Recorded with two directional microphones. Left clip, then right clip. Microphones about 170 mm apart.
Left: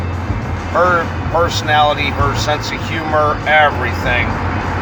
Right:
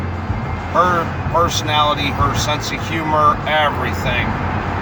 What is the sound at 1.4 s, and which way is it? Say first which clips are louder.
Speech: left 4 dB; 30° right (ahead or behind).